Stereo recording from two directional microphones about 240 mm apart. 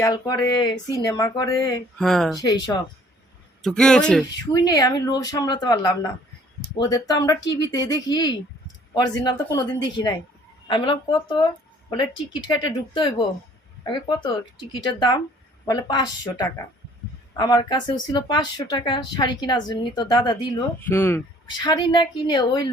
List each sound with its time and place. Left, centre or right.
0.0 s a woman's voice: centre
2.0 s speech: centre
3.6 s speech: centre
4.5 s a woman's voice: centre